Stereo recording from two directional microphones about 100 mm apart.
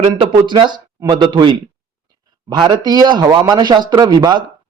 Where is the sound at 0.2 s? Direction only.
50° right (ahead or behind).